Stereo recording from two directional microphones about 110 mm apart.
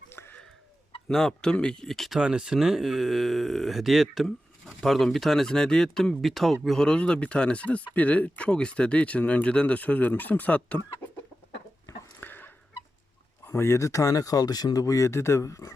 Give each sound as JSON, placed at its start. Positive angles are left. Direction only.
{"t": 0.1, "sound": "fowl", "side_deg": 20}
{"t": 1.0, "sound": "speech", "side_deg": 5}
{"t": 12.2, "sound": "fowl", "side_deg": 15}
{"t": 13.4, "sound": "speech", "side_deg": 25}